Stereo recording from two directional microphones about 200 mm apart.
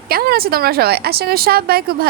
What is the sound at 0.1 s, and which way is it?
Speech, 50° right (ahead or behind).